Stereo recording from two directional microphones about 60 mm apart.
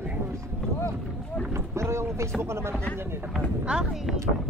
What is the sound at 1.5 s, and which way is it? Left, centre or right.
Boat, right.